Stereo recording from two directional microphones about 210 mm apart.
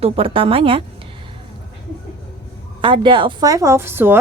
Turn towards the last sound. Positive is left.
turn(degrees=-10)  # may be behind; listen again after turning